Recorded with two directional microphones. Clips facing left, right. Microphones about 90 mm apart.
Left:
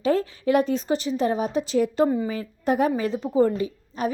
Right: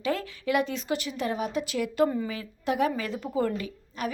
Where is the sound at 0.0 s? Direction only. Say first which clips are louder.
Left 7 dB; 35° left (ahead or behind).